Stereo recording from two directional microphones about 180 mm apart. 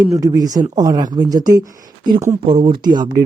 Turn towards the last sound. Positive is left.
turn(degrees=-25)  # may be behind; listen again after turning